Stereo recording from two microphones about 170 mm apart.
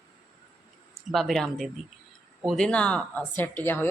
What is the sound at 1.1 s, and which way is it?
Speech, centre (ahead or behind).